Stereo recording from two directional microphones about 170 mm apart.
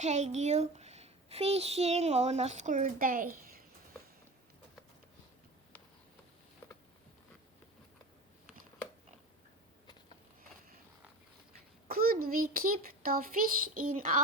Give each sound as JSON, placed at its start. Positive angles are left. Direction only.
{"t": 0.0, "sound": "a woman's voice", "side_deg": -45}
{"t": 11.9, "sound": "a child's voice", "side_deg": -60}